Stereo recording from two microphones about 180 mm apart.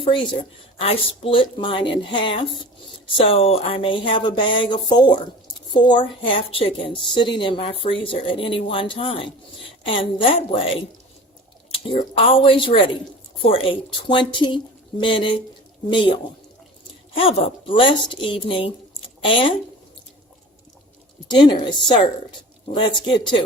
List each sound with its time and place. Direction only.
0.0 s a woman's voice: 25° left (ahead or behind)
3.2 s a woman's voice: 30° left (ahead or behind)
17.2 s a woman's voice: 30° left (ahead or behind)
21.2 s a woman's voice: 25° left (ahead or behind)